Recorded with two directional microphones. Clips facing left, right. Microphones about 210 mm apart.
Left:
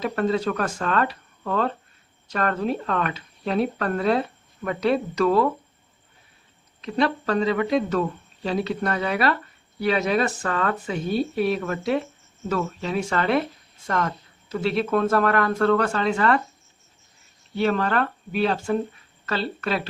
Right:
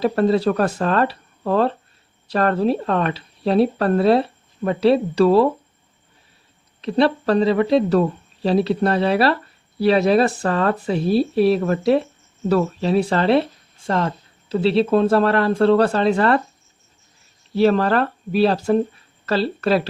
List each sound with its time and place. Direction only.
0.0 s speech: 35° right (ahead or behind)
6.8 s speech: 35° right (ahead or behind)
17.5 s speech: 35° right (ahead or behind)